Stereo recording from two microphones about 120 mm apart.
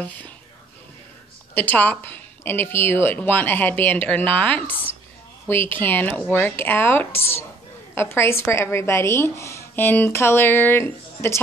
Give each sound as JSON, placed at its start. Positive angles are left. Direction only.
{"t": 1.5, "sound": "a woman's voice", "side_deg": 15}